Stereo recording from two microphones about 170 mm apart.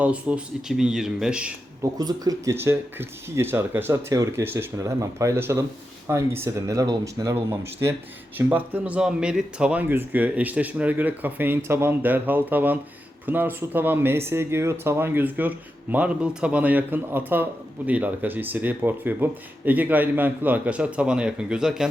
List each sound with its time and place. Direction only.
0.0 s speech: 5° right (ahead or behind)
1.8 s a man's voice: 20° right (ahead or behind); by 21.8 s 5° right (ahead or behind)